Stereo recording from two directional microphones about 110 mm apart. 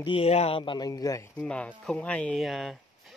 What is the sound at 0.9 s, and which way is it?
Speech, 30° left (ahead or behind).